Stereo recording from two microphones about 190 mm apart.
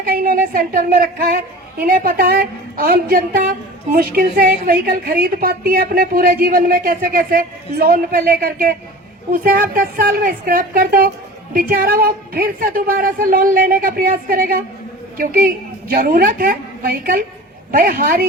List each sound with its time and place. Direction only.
0.0 s a woman's voice: 50° right (ahead or behind)